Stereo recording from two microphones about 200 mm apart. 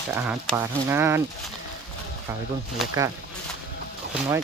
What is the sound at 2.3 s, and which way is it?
Speech, 15° right (ahead or behind).